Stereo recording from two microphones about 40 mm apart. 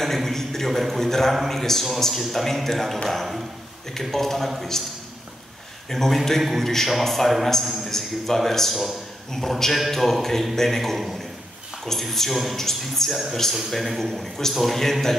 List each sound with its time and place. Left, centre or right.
0.0 s a man's voice: centre
5.9 s a man's voice: centre
8.4 s a man's voice: centre